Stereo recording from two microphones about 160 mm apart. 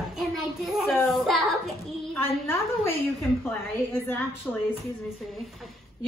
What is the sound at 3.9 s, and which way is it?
Speech, 15° left (ahead or behind).